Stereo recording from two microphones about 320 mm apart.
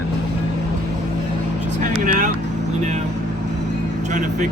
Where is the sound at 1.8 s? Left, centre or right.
Right.